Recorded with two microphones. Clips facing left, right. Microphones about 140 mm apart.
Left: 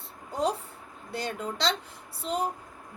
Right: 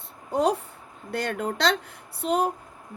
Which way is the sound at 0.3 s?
65° right (ahead or behind).